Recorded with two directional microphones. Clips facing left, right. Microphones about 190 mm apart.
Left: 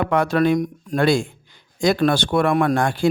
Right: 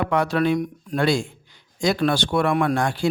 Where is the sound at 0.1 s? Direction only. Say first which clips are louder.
Left 4 dB; 50° left (ahead or behind).